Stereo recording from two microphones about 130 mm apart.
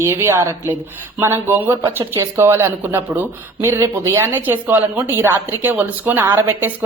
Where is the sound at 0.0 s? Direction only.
20° right (ahead or behind).